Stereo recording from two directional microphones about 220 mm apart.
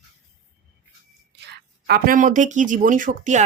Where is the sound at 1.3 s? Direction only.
45° right (ahead or behind).